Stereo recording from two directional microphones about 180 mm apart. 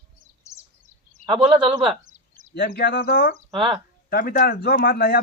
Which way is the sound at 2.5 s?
60° left (ahead or behind).